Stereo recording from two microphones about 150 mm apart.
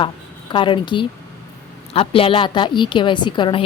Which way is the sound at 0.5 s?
35° left (ahead or behind).